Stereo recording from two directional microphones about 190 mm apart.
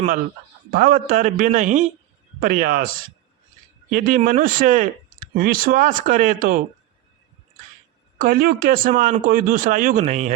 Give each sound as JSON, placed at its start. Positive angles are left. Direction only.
{"t": 0.7, "sound": "speech", "side_deg": -50}
{"t": 8.2, "sound": "speech", "side_deg": -50}